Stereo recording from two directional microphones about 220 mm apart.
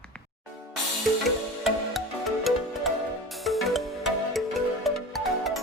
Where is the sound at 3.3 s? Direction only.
Centre (ahead or behind).